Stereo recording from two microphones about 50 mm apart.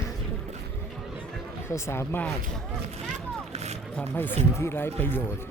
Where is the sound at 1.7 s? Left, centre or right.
Left.